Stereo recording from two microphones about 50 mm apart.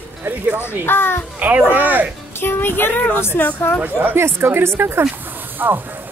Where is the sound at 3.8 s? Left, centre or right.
Right.